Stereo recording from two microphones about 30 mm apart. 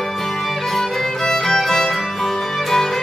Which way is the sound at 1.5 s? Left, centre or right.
Centre.